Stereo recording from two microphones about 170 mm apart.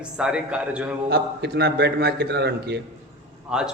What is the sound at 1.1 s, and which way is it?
A man's voice, 75° right (ahead or behind).